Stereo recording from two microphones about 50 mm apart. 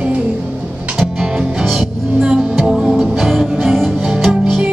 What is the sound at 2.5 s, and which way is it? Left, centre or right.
Music, centre.